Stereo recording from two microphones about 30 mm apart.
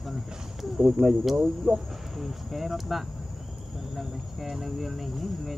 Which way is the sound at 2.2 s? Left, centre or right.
Centre.